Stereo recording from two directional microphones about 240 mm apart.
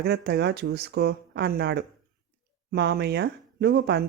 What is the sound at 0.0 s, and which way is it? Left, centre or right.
Speech, right.